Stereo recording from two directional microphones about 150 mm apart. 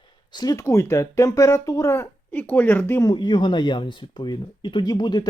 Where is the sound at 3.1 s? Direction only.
30° left (ahead or behind).